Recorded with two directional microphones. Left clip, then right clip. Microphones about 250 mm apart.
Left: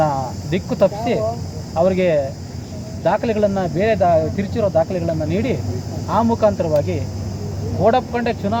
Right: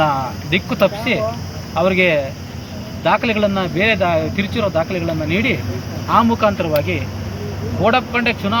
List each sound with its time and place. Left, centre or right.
0.0 s speech: centre